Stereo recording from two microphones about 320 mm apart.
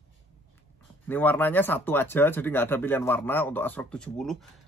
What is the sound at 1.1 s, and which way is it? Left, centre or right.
Speech, centre.